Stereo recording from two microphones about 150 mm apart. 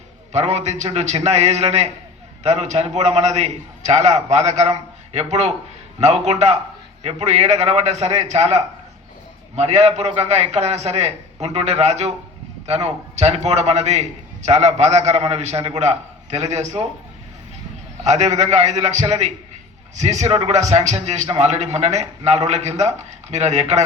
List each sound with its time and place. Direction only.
0.3 s a man's voice: 45° right (ahead or behind)
18.0 s a man's voice: 50° right (ahead or behind)